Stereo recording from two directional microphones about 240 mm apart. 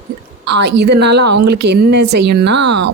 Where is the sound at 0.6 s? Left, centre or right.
Right.